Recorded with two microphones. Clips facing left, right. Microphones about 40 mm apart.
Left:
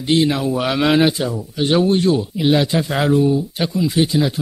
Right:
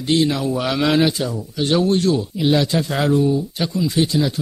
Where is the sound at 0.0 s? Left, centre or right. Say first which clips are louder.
Left 2 dB; centre.